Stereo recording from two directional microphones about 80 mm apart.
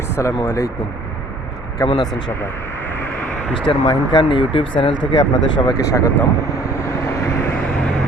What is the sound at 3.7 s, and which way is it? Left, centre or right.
Speech, left.